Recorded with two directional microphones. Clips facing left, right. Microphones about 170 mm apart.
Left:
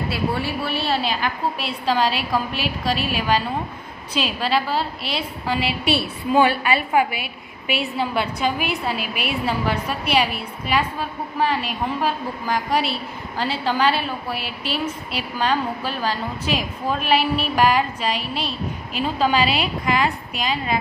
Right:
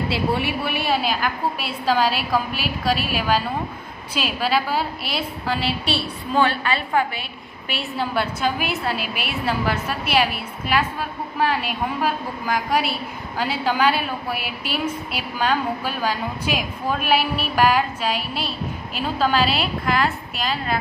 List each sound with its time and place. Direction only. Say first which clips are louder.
0.7 s a woman's voice: even; 15° right (ahead or behind)
6.3 s a woman's voice: left 3 dB; 10° left (ahead or behind)
7.7 s a woman's voice: left 2 dB; centre (ahead or behind)